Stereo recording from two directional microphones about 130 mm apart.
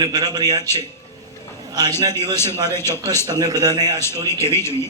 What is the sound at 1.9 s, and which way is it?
A man's voice, 20° left (ahead or behind).